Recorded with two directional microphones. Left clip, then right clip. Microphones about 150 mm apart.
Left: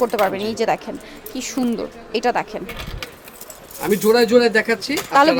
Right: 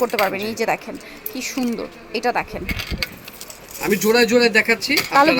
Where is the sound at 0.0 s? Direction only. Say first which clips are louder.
Left 1 dB; 5° left (ahead or behind).